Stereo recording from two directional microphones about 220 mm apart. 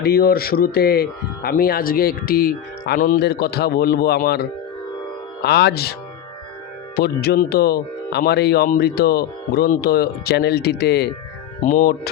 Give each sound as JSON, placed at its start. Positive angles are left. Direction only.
{"t": 0.0, "sound": "speech", "side_deg": 45}